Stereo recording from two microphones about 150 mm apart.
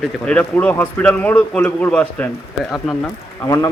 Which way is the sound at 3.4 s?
20° left (ahead or behind).